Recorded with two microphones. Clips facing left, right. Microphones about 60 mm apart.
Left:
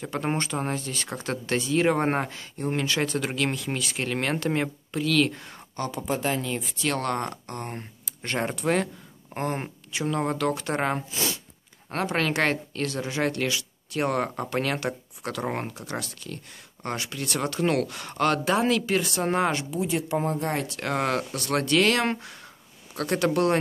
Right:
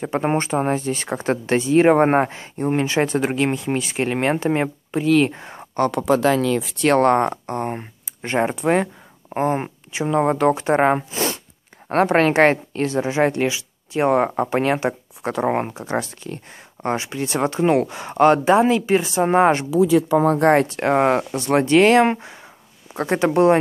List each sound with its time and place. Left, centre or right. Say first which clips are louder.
0.0 s speech: right 7 dB; right
5.8 s speech: right 11 dB; right
6.8 s speech: right 12 dB; right
20.3 s speech: right 13 dB; right
20.6 s speech: right 10 dB; right